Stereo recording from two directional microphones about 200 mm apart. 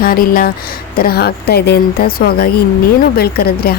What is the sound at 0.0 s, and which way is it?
A woman's voice, 45° left (ahead or behind).